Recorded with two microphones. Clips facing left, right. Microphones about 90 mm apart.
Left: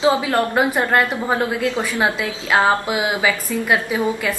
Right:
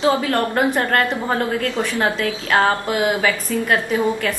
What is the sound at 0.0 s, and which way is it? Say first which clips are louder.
A woman's voice: left 1 dB; 20° left (ahead or behind).